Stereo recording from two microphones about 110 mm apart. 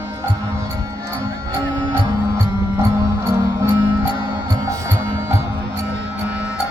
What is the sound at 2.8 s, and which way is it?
Music, 25° right (ahead or behind).